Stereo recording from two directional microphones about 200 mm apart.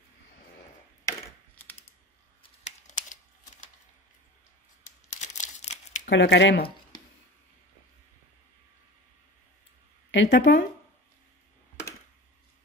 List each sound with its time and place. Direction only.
1.0 s computer keyboard: 15° left (ahead or behind)
2.6 s computer keyboard: 40° left (ahead or behind)
4.8 s crumpling: 35° left (ahead or behind)
6.0 s speech: 55° left (ahead or behind)
10.1 s speech: 60° left (ahead or behind)